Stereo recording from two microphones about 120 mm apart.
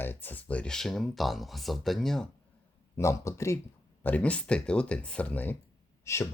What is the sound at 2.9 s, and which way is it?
Speech, 25° left (ahead or behind).